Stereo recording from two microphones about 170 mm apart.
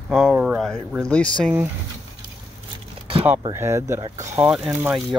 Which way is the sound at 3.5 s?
15° right (ahead or behind).